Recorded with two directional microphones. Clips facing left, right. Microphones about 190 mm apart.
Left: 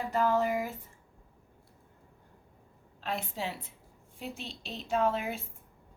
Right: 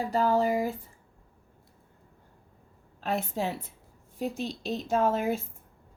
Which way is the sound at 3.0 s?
45° right (ahead or behind).